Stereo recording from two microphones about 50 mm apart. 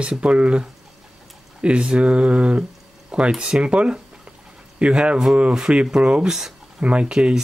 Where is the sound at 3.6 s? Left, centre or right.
Right.